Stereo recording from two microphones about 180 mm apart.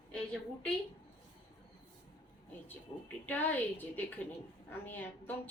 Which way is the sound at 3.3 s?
10° left (ahead or behind).